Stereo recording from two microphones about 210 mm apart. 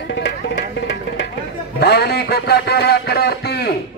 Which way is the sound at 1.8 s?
50° left (ahead or behind).